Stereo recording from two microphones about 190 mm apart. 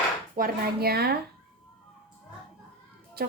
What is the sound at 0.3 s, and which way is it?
Speech, 50° right (ahead or behind).